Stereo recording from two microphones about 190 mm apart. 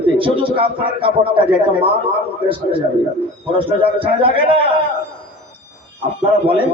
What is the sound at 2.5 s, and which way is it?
A man's voice, 25° right (ahead or behind).